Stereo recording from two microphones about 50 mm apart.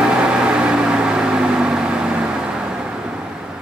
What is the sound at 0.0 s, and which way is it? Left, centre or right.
Microwave oven, centre.